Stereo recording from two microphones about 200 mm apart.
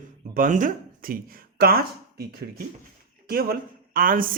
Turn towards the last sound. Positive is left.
turn(degrees=-45)  # may be behind; listen again after turning